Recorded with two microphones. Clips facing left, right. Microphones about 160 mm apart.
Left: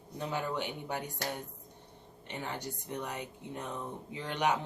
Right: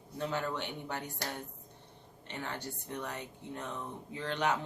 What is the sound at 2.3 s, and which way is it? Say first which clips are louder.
Speech: left 1 dB; 15° left (ahead or behind).